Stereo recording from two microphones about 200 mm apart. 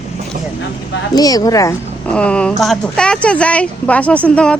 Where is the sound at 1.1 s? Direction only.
20° left (ahead or behind).